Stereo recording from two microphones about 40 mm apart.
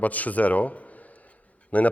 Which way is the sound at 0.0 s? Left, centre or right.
Left.